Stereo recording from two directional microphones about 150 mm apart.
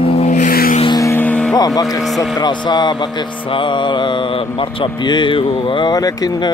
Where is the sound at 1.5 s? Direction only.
25° left (ahead or behind).